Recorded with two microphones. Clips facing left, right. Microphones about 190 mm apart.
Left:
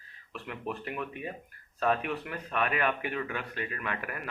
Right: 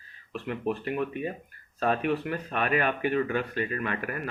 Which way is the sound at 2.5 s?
40° right (ahead or behind).